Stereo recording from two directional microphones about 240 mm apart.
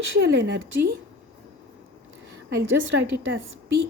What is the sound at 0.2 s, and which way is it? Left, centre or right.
Speech, right.